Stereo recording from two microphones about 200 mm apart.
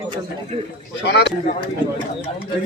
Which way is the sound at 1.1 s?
55° left (ahead or behind).